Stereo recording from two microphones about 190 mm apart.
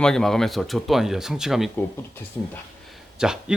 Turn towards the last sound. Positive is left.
turn(degrees=-5)  # may be behind; listen again after turning